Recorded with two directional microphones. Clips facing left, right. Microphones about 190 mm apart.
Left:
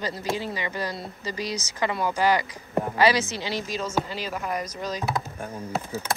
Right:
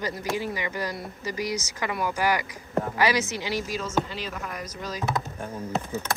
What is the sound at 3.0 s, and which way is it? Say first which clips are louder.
Speech: left 4 dB; 15° right (ahead or behind).